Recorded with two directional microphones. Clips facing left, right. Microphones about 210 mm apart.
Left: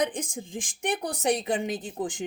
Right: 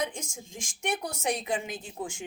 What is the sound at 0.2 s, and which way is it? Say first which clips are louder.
Speech: left 7 dB; 30° left (ahead or behind).